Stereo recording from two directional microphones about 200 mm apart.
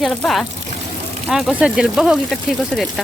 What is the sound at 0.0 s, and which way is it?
Speech, centre (ahead or behind).